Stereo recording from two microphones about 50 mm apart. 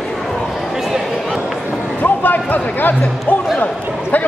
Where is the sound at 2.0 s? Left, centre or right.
Left.